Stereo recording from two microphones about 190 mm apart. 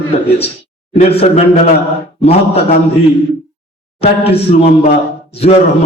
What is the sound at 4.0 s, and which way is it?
Speech, 30° left (ahead or behind).